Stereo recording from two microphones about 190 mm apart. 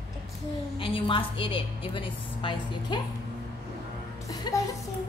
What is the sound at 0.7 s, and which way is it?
A woman's voice, 25° left (ahead or behind).